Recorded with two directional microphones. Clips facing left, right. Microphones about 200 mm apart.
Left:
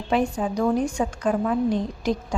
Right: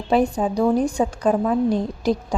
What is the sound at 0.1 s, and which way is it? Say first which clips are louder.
Speech: right 4 dB; 35° right (ahead or behind).